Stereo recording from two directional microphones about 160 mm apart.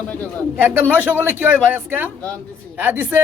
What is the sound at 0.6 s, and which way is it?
A man's voice, 10° right (ahead or behind).